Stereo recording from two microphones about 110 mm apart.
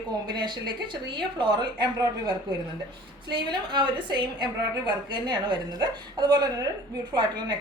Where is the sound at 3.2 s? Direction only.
45° right (ahead or behind).